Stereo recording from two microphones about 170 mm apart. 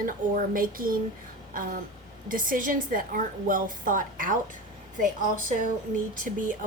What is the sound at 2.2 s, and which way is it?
Speech, 55° right (ahead or behind).